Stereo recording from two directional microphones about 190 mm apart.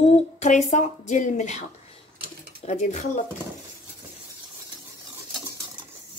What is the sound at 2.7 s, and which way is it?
Speech, 35° left (ahead or behind).